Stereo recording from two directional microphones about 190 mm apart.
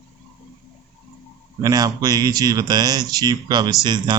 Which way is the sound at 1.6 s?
20° right (ahead or behind).